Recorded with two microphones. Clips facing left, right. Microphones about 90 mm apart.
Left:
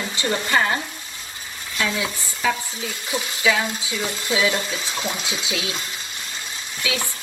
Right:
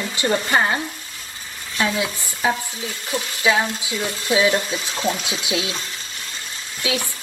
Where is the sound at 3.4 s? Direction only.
25° right (ahead or behind).